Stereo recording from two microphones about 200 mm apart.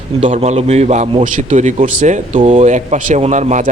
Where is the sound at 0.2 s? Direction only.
35° right (ahead or behind).